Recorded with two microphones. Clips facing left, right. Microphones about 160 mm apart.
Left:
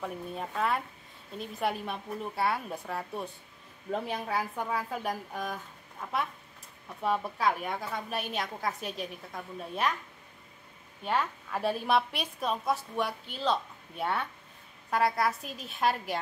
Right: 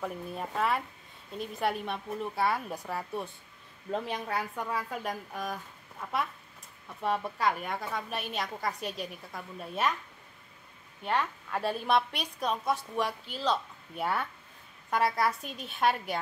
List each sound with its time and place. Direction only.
0.0 s a woman's voice: centre (ahead or behind)
7.0 s a woman's voice: centre (ahead or behind)
11.1 s a woman's voice: centre (ahead or behind)